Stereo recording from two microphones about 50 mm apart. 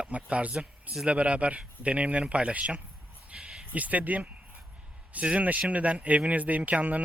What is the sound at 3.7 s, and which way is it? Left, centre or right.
Speech, right.